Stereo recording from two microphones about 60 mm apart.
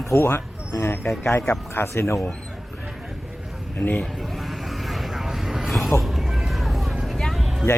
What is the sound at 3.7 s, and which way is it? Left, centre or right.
Speech, left.